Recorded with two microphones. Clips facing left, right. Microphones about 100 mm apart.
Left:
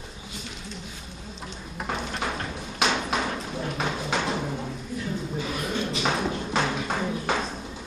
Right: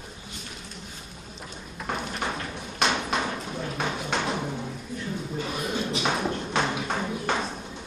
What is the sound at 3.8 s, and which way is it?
Clip-clop, 5° left (ahead or behind).